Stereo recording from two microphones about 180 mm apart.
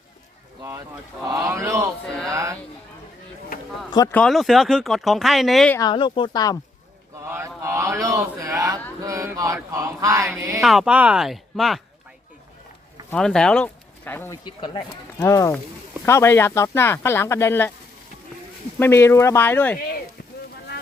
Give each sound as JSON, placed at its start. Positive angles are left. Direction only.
{"t": 1.3, "sound": "speech", "side_deg": -15}
{"t": 3.8, "sound": "speech", "side_deg": 25}
{"t": 4.1, "sound": "speech", "side_deg": 5}
{"t": 5.7, "sound": "speech", "side_deg": 25}
{"t": 7.3, "sound": "a sound", "side_deg": -15}
{"t": 9.0, "sound": "mantra", "side_deg": -15}
{"t": 10.6, "sound": "speech", "side_deg": 0}
{"t": 13.1, "sound": "speech", "side_deg": 5}
{"t": 14.4, "sound": "speech", "side_deg": 25}
{"t": 18.8, "sound": "speech", "side_deg": 15}